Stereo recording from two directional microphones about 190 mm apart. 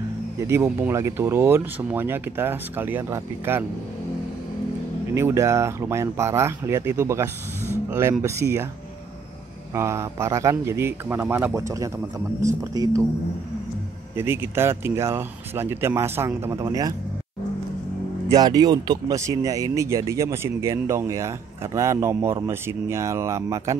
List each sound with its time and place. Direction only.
0.5 s speech: 15° right (ahead or behind)
5.1 s speech: 15° right (ahead or behind)
9.8 s speech: 15° right (ahead or behind)
14.1 s speech: 10° right (ahead or behind)
18.3 s speech: 20° right (ahead or behind)